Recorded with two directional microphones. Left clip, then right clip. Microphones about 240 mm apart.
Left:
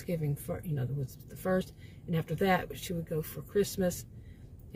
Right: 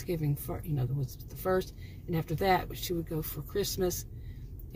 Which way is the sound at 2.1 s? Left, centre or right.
Centre.